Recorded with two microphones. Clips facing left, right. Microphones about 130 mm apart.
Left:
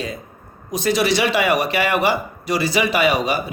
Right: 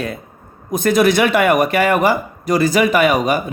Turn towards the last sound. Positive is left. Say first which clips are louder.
# right 4 dB
turn(degrees=-45)  # may be behind; listen again after turning